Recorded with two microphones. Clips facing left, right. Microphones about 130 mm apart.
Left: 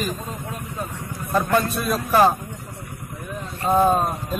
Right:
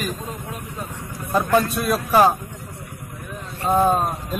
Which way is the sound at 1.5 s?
10° right (ahead or behind).